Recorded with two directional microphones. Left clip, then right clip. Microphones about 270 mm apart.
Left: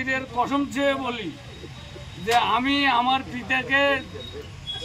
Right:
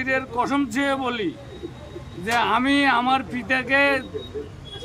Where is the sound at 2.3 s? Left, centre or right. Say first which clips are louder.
Right 1 dB; centre.